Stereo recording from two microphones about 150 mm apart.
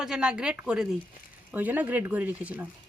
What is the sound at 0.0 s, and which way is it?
Speech, 5° right (ahead or behind).